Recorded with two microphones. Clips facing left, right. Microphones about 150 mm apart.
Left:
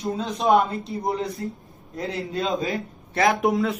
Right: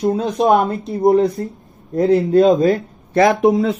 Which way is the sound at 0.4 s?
55° right (ahead or behind).